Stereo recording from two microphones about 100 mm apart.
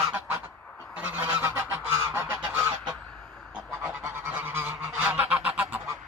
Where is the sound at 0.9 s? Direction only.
15° right (ahead or behind).